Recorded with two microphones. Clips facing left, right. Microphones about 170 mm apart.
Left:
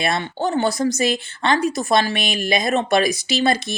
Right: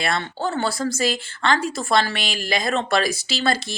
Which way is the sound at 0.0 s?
15° left (ahead or behind).